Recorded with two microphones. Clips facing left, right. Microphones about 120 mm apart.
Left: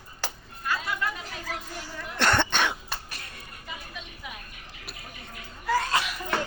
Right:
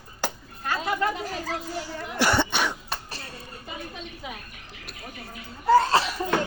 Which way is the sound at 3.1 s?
30° right (ahead or behind).